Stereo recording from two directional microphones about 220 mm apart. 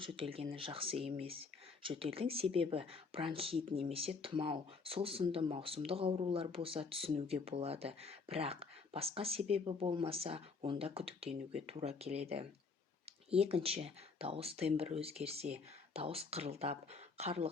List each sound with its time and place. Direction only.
0.0 s speech: 25° right (ahead or behind)